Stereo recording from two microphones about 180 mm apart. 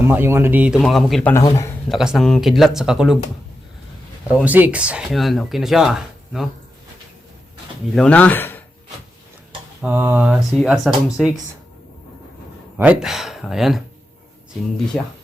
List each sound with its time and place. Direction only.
0.1 s speech: 10° right (ahead or behind)
1.3 s speech: 20° left (ahead or behind)
1.9 s speech: centre (ahead or behind)
4.4 s speech: 10° right (ahead or behind)
7.9 s speech: 5° left (ahead or behind)
9.8 s speech: 10° right (ahead or behind)
12.7 s speech: 10° right (ahead or behind)
14.9 s speech: 5° left (ahead or behind)